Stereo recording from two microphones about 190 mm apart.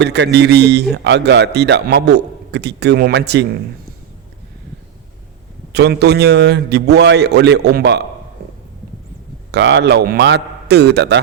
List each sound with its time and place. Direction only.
0.0 s a man's voice: 65° right (ahead or behind)
5.7 s a man's voice: 60° right (ahead or behind)
9.5 s a man's voice: 65° right (ahead or behind)